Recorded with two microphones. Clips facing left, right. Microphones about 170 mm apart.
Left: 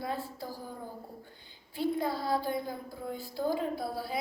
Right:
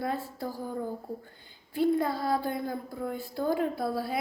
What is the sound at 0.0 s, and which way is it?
Speech, 55° right (ahead or behind).